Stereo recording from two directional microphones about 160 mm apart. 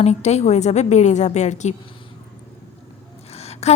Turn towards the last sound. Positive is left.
turn(degrees=40)  # may be behind; listen again after turning